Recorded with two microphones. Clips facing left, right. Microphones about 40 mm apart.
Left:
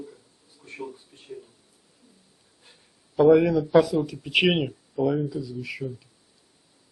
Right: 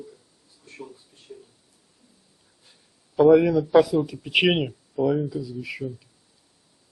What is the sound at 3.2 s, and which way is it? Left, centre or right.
Speech, centre.